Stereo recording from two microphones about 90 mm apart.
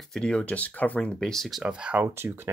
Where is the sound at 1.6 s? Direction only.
10° right (ahead or behind).